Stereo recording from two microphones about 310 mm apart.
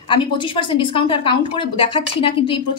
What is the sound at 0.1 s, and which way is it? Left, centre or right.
Speech, centre.